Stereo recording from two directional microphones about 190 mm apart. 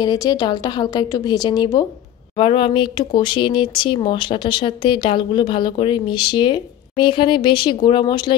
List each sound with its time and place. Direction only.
0.0 s speech: 20° left (ahead or behind)